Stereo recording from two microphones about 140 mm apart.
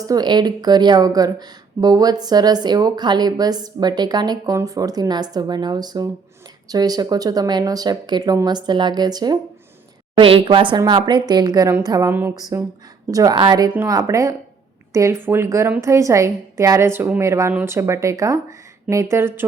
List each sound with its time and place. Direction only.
0.0 s a woman's voice: 30° right (ahead or behind)
10.2 s a woman's voice: 40° right (ahead or behind); by 19.5 s 20° right (ahead or behind)